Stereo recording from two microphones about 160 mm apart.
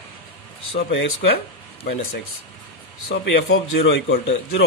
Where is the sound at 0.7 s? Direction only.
85° left.